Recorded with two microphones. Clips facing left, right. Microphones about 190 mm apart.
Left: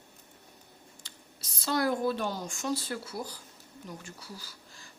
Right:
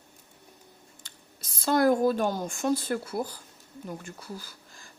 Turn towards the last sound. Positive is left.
turn(degrees=-50)  # may be behind; listen again after turning